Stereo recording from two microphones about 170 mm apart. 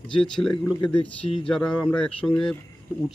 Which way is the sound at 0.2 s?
5° left (ahead or behind).